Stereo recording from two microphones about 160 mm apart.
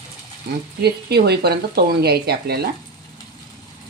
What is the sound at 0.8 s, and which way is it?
Speech, 90° right.